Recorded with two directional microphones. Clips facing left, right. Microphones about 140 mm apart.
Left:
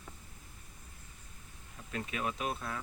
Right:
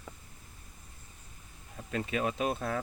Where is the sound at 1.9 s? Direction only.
35° right (ahead or behind).